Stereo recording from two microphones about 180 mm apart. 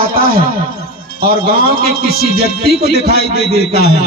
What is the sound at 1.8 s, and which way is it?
A man's voice, 60° left (ahead or behind).